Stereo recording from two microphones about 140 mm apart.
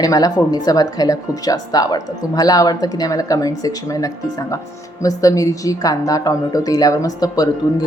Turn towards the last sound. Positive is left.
turn(degrees=25)  # may be behind; listen again after turning